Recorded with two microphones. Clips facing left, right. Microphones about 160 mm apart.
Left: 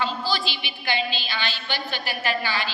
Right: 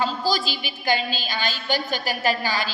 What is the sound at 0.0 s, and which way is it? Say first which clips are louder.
A woman's voice: right 3 dB; 40° right (ahead or behind).